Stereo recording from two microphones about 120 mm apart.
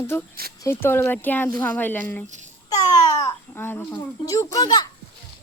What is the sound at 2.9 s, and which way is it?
Babbling, 35° left (ahead or behind).